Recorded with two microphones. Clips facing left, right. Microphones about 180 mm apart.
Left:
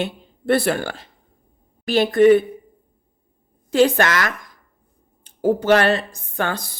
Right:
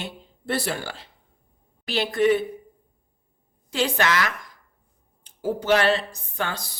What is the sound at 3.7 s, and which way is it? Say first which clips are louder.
Speech: left 7 dB; 50° left (ahead or behind).